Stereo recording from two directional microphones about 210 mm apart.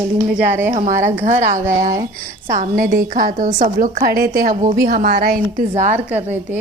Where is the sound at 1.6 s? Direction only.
15° right (ahead or behind).